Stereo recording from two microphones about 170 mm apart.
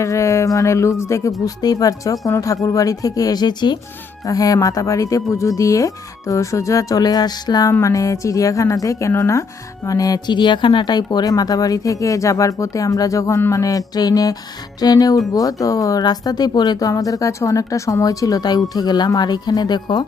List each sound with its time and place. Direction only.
0.0 s speech: 15° left (ahead or behind)